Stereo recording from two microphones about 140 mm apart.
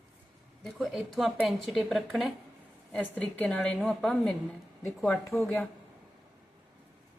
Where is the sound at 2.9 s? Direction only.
10° left (ahead or behind).